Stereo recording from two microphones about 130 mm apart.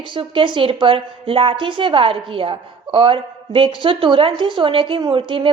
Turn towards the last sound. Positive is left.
turn(degrees=-40)  # may be behind; listen again after turning